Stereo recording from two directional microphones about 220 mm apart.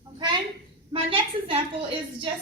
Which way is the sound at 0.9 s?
25° right (ahead or behind).